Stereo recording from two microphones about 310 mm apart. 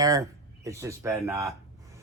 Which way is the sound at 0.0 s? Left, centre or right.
Centre.